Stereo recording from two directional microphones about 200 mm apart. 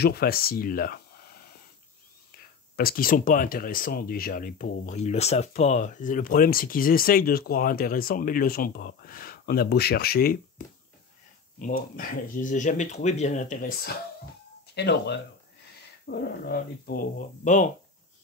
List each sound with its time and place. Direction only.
0.0 s speech: 50° left (ahead or behind)
2.7 s speech: 50° left (ahead or behind)
11.6 s speech: 45° left (ahead or behind)